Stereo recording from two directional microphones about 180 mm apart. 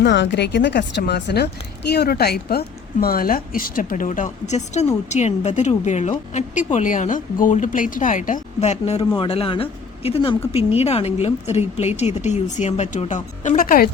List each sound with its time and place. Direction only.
0.0 s a woman's voice: 80° left; by 13.9 s 55° left (ahead or behind)